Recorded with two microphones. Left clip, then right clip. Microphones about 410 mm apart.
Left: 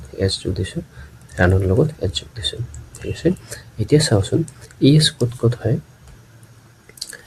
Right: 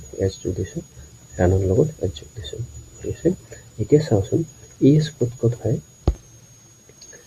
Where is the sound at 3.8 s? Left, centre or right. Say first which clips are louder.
Left 1 dB; right.